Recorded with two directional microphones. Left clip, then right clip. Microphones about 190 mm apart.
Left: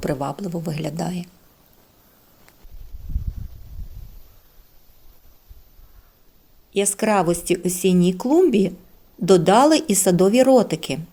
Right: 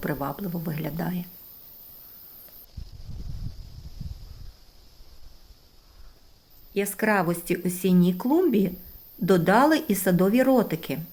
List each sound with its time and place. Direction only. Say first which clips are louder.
0.0 s speech: left 5 dB; 35° left (ahead or behind)
6.7 s speech: left 5 dB; 35° left (ahead or behind)